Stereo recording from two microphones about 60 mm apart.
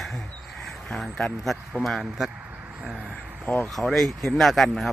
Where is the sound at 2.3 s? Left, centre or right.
Right.